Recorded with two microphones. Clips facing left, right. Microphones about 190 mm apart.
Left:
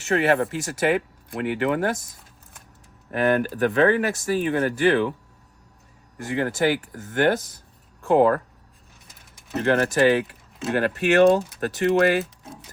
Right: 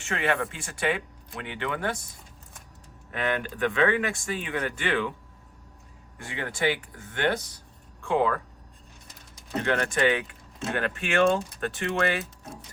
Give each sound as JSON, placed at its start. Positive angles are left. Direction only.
{"t": 0.0, "sound": "speech", "side_deg": 40}
{"t": 3.1, "sound": "speech", "side_deg": 45}
{"t": 6.1, "sound": "speech", "side_deg": 45}
{"t": 9.6, "sound": "speech", "side_deg": 35}